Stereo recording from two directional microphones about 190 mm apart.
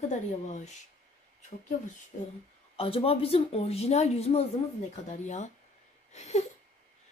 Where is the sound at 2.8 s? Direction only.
30° left (ahead or behind).